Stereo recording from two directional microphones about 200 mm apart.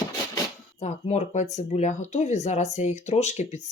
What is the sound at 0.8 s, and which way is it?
Speech, 35° left (ahead or behind).